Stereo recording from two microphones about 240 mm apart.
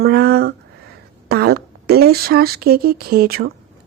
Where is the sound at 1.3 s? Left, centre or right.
Right.